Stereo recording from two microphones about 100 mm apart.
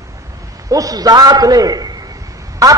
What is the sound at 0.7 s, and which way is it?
A man's voice, 35° right (ahead or behind).